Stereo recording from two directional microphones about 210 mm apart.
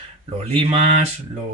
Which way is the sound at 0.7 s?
30° right (ahead or behind).